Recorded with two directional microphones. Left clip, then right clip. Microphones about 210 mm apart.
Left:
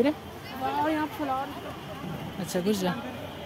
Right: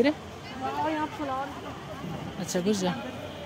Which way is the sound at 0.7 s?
55° left (ahead or behind).